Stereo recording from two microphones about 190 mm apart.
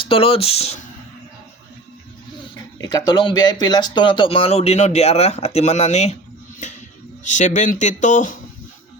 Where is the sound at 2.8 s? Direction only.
20° left (ahead or behind); by 6.1 s 35° left (ahead or behind).